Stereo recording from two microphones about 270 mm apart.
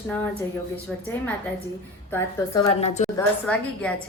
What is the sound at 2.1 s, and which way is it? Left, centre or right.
A woman's voice, centre.